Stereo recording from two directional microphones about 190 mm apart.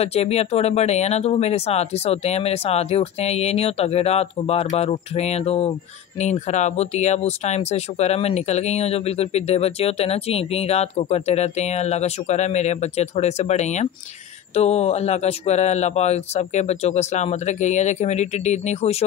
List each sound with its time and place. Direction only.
0.0 s speech: 35° left (ahead or behind)